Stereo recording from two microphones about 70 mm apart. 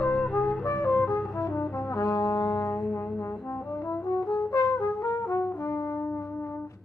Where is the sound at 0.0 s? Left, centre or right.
Centre.